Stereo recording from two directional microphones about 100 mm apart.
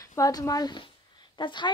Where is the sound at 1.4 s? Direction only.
50° left (ahead or behind).